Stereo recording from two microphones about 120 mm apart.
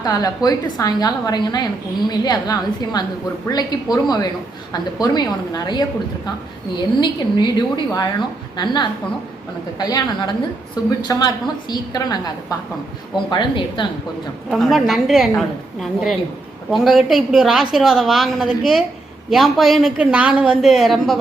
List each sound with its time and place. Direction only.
0.0 s a woman's voice: 35° left (ahead or behind)
8.5 s a woman's voice: 40° left (ahead or behind)
14.5 s a woman's voice: centre (ahead or behind)